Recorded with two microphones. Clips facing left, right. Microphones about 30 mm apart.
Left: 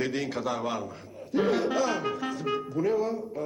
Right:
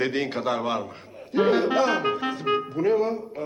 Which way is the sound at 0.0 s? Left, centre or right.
Right.